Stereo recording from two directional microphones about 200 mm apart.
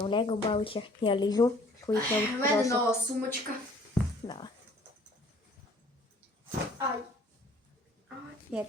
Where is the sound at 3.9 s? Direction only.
20° left (ahead or behind).